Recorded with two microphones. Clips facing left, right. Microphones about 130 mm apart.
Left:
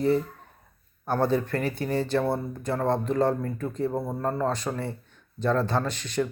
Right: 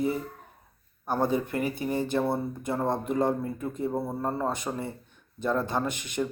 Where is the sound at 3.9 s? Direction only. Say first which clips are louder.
Left 1 dB; centre (ahead or behind).